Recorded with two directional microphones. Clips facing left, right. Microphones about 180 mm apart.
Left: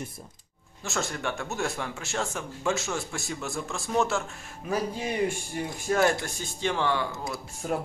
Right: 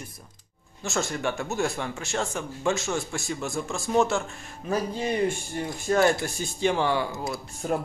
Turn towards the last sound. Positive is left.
turn(degrees=-5)  # may be behind; listen again after turning